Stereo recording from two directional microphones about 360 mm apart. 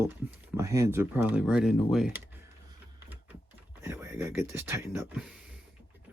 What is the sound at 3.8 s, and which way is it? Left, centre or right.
Speech, centre.